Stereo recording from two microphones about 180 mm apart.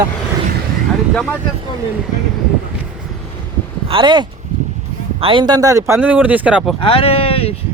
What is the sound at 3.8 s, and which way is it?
Speech, 30° right (ahead or behind).